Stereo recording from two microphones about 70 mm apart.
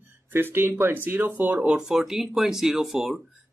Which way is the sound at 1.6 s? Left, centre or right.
Centre.